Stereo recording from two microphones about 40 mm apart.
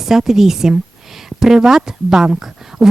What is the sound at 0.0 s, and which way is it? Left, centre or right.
A woman's voice, centre.